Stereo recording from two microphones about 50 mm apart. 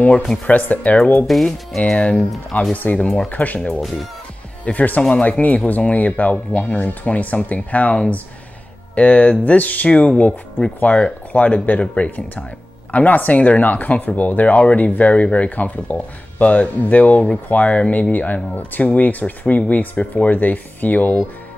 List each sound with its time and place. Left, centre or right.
0.5 s speech: left
1.2 s speech: centre
1.9 s speech: centre
2.7 s speech: left